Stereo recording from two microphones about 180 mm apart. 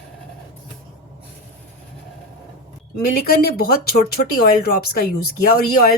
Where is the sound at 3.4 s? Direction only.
60° left (ahead or behind).